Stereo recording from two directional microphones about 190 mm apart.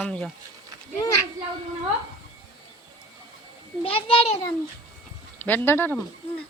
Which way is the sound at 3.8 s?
30° left (ahead or behind).